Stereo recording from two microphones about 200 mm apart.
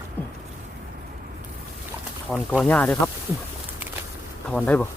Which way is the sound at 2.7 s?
5° left (ahead or behind).